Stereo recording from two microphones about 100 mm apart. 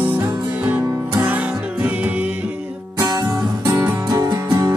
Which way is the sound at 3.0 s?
35° right (ahead or behind).